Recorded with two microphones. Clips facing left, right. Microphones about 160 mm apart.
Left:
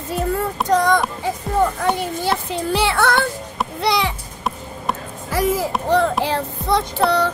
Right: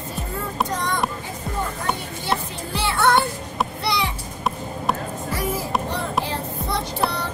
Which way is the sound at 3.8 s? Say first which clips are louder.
Left 8 dB; 90° left.